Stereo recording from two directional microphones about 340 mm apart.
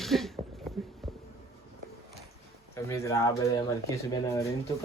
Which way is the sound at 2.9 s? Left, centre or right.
Centre.